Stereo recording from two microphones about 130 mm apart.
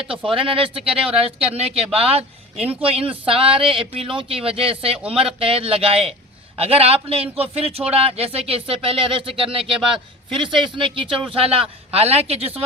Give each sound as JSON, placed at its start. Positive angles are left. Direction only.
{"t": 0.3, "sound": "speech", "side_deg": -40}
{"t": 0.9, "sound": "speech", "side_deg": -5}
{"t": 1.4, "sound": "speech", "side_deg": -50}